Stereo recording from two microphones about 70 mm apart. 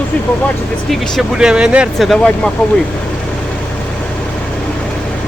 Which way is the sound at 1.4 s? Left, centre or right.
Centre.